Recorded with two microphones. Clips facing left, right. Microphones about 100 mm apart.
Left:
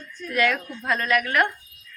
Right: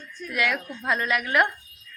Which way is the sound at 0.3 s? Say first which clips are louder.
Left 4 dB; 10° right (ahead or behind).